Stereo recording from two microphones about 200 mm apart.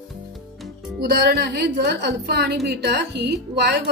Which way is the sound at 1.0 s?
55° right (ahead or behind).